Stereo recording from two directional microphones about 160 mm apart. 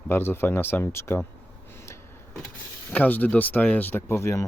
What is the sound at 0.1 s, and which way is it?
Speech, 15° left (ahead or behind).